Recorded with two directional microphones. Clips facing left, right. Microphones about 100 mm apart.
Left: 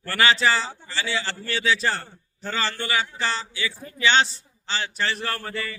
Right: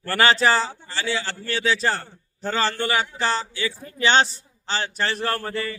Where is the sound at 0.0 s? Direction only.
40° right (ahead or behind).